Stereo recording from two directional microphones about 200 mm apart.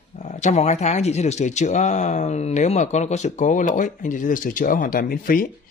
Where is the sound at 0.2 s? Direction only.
35° left (ahead or behind).